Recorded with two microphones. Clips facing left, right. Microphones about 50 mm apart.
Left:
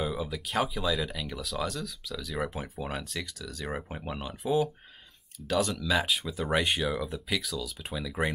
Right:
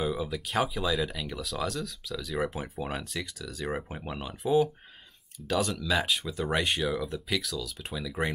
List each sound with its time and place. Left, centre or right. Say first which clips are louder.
0.0 s speech: right 2 dB; centre